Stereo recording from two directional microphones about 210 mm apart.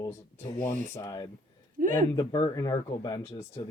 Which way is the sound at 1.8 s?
40° right (ahead or behind).